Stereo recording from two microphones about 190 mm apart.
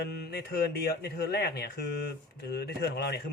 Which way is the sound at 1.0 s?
55° left (ahead or behind).